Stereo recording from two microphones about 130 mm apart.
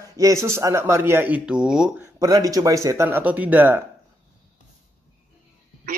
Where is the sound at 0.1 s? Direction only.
25° right (ahead or behind); by 2.0 s 5° right (ahead or behind).